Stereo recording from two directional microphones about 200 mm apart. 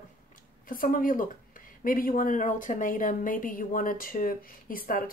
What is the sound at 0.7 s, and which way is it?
A woman's voice, 45° left (ahead or behind).